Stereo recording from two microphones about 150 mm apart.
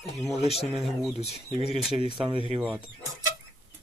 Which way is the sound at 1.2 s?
45° left (ahead or behind).